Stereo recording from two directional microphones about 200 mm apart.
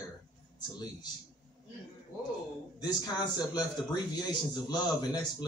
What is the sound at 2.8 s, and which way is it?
Speech, 20° left (ahead or behind).